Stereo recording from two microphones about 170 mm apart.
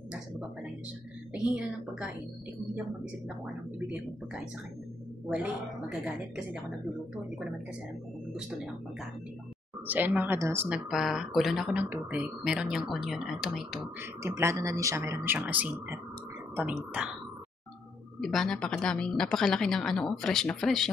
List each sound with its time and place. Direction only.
1.3 s speech: 5° right (ahead or behind)
5.2 s speech: 5° right (ahead or behind)
9.8 s speech: 10° right (ahead or behind)
10.9 s speech: centre (ahead or behind)
14.2 s speech: 15° right (ahead or behind)
18.2 s speech: centre (ahead or behind)